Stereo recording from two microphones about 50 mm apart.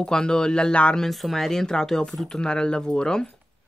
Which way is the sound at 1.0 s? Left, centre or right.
Centre.